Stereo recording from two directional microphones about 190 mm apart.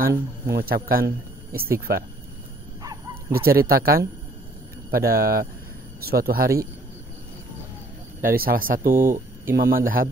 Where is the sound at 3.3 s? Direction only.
50° right (ahead or behind).